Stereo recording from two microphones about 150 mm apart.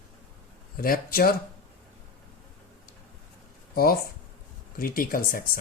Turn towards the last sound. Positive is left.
turn(degrees=75)  # may be behind; listen again after turning